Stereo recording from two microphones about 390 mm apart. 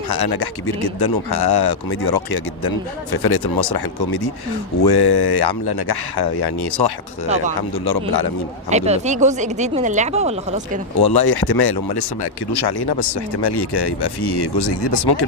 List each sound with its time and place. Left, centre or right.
0.1 s speech: left
8.7 s speech: centre
11.0 s speech: left